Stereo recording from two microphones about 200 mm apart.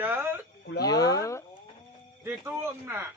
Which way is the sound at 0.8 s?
20° left (ahead or behind).